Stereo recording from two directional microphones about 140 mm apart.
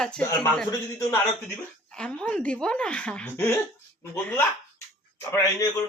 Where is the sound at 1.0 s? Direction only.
20° left (ahead or behind).